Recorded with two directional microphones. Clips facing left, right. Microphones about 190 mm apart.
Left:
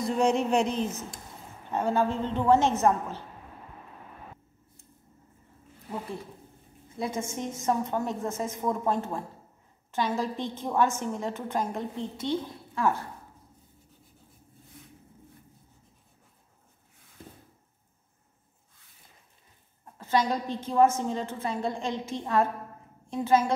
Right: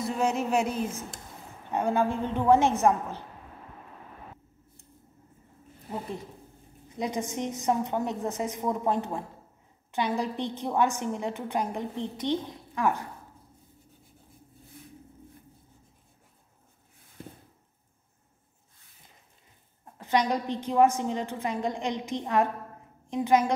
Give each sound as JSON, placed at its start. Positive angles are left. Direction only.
{"t": 0.0, "sound": "a woman's voice", "side_deg": -5}
{"t": 7.0, "sound": "a woman's voice", "side_deg": -15}
{"t": 20.0, "sound": "a woman's voice", "side_deg": -15}